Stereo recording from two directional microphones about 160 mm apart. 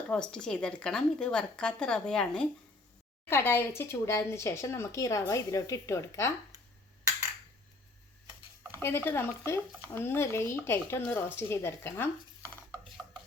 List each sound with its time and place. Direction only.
0.1 s a woman's voice: 5° left (ahead or behind)
8.7 s speech: 15° left (ahead or behind)